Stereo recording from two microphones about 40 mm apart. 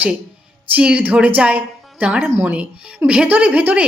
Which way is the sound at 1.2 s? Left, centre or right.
Right.